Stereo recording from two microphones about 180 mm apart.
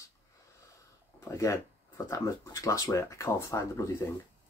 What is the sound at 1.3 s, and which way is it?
Speech, 15° left (ahead or behind).